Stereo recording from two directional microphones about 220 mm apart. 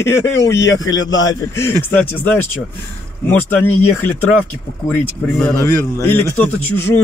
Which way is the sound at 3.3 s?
10° left (ahead or behind).